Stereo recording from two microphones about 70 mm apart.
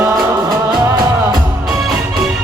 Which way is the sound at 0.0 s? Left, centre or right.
Right.